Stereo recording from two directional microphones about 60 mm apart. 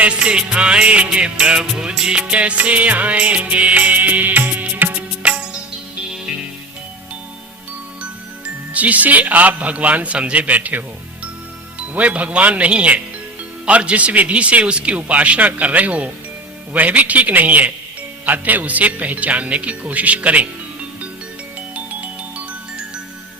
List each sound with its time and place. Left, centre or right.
0.0 s music: centre
8.7 s music: right